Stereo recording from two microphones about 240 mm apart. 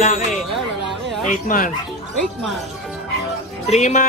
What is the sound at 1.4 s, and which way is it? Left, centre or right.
Speech, left.